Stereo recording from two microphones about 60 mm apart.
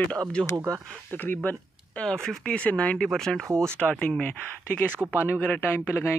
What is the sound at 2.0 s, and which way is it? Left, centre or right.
Speech, centre.